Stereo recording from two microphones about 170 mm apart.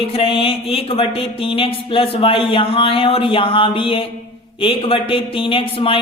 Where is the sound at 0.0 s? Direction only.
35° left (ahead or behind).